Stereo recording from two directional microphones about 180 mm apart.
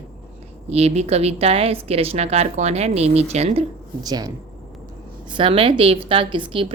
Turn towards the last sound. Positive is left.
turn(degrees=-30)  # may be behind; listen again after turning